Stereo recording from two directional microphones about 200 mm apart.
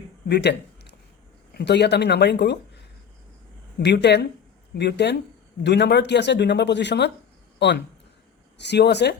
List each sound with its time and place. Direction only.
0.3 s speech: 55° left (ahead or behind)
3.8 s speech: 55° left (ahead or behind)